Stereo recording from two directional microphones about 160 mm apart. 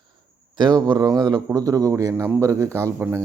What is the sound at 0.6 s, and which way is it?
Speech, 25° right (ahead or behind).